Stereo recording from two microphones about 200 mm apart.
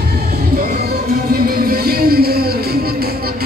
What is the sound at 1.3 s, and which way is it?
Music, 50° right (ahead or behind).